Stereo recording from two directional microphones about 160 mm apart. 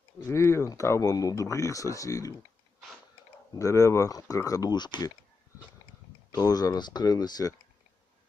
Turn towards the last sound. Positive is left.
turn(degrees=25)  # may be behind; listen again after turning